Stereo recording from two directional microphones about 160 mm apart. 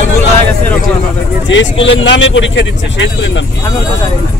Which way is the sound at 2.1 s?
90° left.